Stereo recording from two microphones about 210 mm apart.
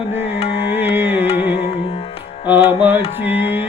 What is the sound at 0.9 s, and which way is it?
Music, 10° right (ahead or behind).